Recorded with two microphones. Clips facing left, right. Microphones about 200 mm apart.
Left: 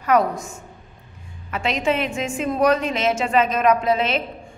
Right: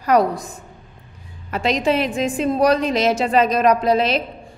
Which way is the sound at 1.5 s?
35° right (ahead or behind).